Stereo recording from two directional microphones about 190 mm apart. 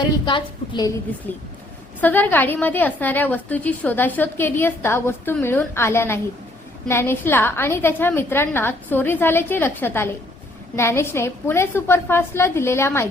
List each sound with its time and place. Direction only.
0.0 s a woman's voice: 25° left (ahead or behind)
2.0 s a woman's voice: 10° left (ahead or behind)